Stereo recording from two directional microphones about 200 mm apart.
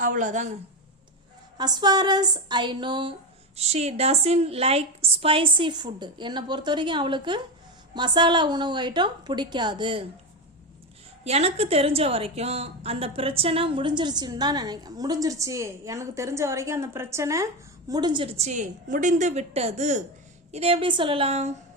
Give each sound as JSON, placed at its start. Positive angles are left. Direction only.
{"t": 0.0, "sound": "speech", "side_deg": -40}
{"t": 1.5, "sound": "a woman's voice", "side_deg": -20}
{"t": 11.2, "sound": "a woman's voice", "side_deg": -30}